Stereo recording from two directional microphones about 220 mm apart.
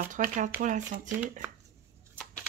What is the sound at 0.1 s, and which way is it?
Speech, 35° right (ahead or behind).